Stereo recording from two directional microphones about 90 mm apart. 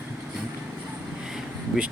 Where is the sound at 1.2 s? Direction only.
5° right (ahead or behind).